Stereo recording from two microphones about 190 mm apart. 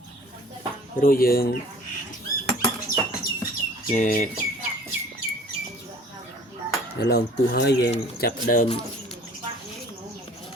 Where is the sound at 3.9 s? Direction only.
45° left (ahead or behind).